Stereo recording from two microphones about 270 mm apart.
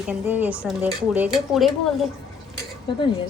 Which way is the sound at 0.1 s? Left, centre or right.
Centre.